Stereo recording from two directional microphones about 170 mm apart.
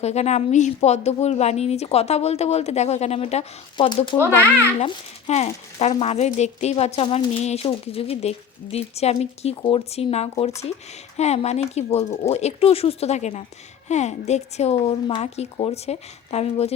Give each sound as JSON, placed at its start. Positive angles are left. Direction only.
{"t": 0.0, "sound": "speech", "side_deg": 40}
{"t": 4.8, "sound": "speech", "side_deg": 40}